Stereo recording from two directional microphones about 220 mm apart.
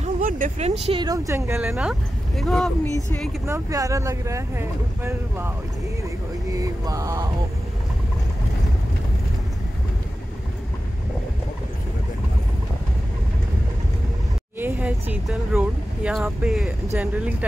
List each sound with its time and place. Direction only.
0.0 s speech: 35° right (ahead or behind); by 3.3 s 5° left (ahead or behind)
3.4 s speech: 15° right (ahead or behind)
6.5 s speech: 15° right (ahead or behind)
14.6 s speech: 5° right (ahead or behind)